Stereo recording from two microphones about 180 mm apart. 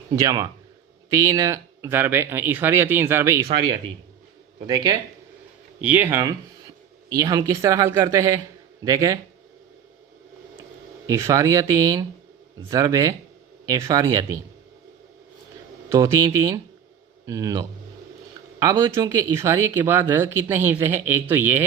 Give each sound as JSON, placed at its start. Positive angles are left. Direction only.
{"t": 0.2, "sound": "speech", "side_deg": -20}
{"t": 4.6, "sound": "speech", "side_deg": -20}
{"t": 5.8, "sound": "speech", "side_deg": -10}
{"t": 11.1, "sound": "speech", "side_deg": -15}
{"t": 15.9, "sound": "speech", "side_deg": -15}